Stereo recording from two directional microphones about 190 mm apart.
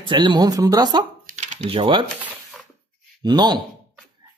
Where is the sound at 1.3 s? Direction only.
40° right (ahead or behind).